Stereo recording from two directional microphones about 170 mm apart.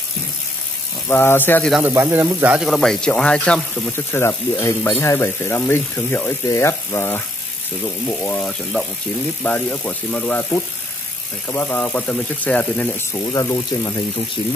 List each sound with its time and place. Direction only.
1.0 s speech: 15° left (ahead or behind)
1.7 s speech: 10° right (ahead or behind); by 12.9 s 10° left (ahead or behind)
13.1 s speech: 20° left (ahead or behind)